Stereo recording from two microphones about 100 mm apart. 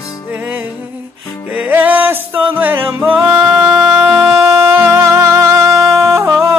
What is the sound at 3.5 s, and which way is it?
Music, centre (ahead or behind).